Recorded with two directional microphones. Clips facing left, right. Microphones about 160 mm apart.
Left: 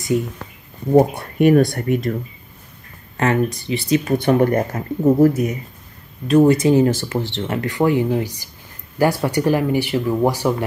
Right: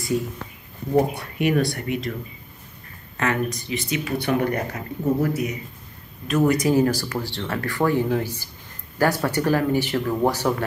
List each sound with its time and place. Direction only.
0.9 s speech: 45° left (ahead or behind)
3.2 s speech: 30° left (ahead or behind)
4.0 s speech: 45° left (ahead or behind)
6.2 s speech: 30° left (ahead or behind); by 10.5 s 10° left (ahead or behind)